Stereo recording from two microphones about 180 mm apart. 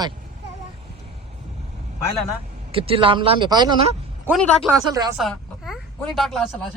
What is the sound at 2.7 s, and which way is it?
Speech, 30° right (ahead or behind).